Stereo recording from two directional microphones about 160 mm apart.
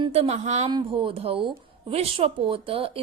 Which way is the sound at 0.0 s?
40° right (ahead or behind).